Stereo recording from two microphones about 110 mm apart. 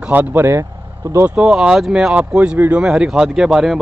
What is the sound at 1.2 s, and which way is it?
Speech, 5° right (ahead or behind).